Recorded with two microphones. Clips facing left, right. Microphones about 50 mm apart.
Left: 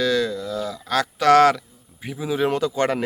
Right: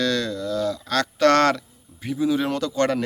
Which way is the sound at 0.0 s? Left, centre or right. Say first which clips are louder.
Left 2 dB; centre.